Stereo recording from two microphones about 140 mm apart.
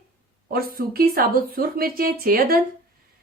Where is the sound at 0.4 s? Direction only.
90° right.